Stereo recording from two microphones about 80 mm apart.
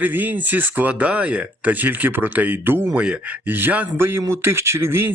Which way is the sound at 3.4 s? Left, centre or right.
Right.